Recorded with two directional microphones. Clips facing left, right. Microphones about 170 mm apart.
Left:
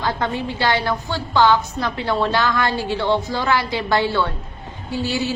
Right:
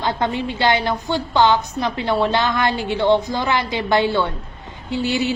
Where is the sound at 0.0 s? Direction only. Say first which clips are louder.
Right 1 dB; 20° right (ahead or behind).